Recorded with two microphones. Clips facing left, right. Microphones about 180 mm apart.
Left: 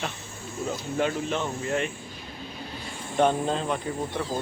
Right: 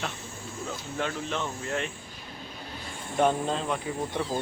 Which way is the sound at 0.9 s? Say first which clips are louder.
Left 4 dB; 10° left (ahead or behind).